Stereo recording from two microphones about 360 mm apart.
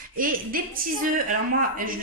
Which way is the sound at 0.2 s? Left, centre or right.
Right.